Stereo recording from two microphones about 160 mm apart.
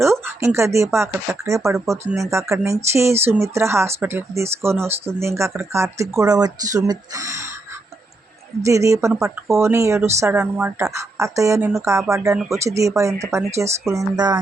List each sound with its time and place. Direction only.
0.0 s speech: 15° right (ahead or behind)
8.6 s speech: 20° right (ahead or behind)